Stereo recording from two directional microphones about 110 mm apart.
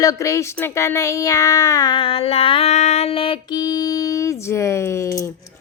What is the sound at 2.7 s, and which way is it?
Female singing, 90° left.